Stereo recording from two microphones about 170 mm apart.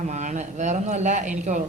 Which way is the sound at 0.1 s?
45° right (ahead or behind).